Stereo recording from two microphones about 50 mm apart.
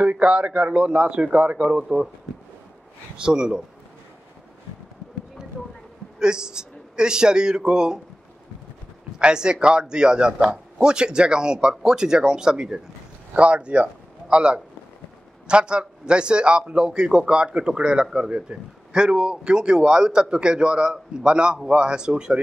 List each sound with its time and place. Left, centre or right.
0.0 s a man's voice: right
3.2 s speech: centre
6.1 s a man's voice: centre
9.2 s a man's voice: centre